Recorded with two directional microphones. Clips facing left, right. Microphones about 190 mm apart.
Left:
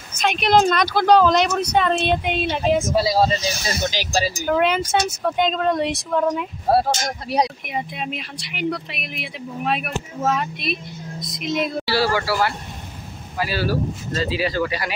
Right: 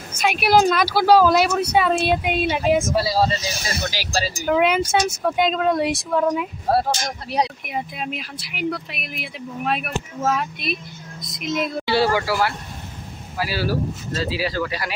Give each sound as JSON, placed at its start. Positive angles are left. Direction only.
{"t": 0.1, "sound": "speech", "side_deg": -5}
{"t": 3.0, "sound": "speech", "side_deg": 15}
{"t": 4.5, "sound": "speech", "side_deg": -5}
{"t": 6.2, "sound": "speech", "side_deg": 5}
{"t": 11.8, "sound": "speech", "side_deg": -20}
{"t": 12.2, "sound": "speech", "side_deg": -10}